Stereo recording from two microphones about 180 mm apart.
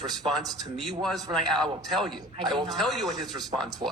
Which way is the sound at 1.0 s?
Centre (ahead or behind).